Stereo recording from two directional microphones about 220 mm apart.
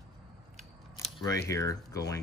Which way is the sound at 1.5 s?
15° left (ahead or behind).